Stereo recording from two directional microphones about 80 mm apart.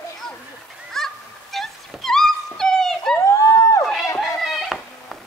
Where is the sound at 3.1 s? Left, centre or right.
Left.